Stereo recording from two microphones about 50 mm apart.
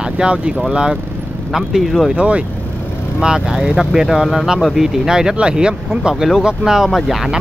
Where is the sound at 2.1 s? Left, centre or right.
Right.